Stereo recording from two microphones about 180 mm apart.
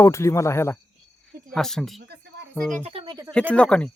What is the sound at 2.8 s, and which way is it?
Speech, 30° right (ahead or behind).